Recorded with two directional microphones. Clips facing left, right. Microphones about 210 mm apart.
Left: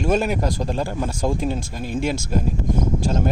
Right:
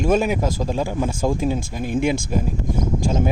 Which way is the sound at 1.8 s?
55° right (ahead or behind).